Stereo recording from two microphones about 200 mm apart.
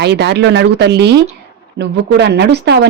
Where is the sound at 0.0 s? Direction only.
55° right (ahead or behind).